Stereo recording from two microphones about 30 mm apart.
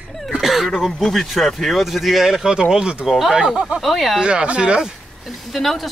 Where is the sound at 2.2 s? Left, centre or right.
Centre.